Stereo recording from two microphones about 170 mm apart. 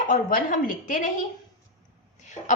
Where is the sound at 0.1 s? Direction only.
55° left (ahead or behind).